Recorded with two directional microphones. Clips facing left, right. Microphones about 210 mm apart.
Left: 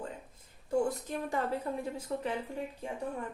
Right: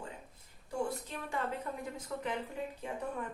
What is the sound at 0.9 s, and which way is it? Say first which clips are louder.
Speech: left 5 dB; 40° left (ahead or behind).